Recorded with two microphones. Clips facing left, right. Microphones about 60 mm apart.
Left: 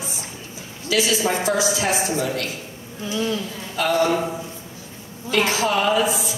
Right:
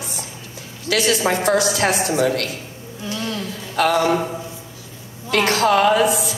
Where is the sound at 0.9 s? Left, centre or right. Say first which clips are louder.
Right 2 dB; right.